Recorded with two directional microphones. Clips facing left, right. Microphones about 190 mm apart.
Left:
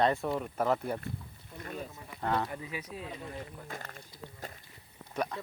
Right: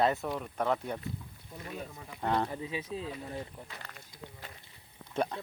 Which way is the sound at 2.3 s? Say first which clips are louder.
Right 3 dB; 30° right (ahead or behind).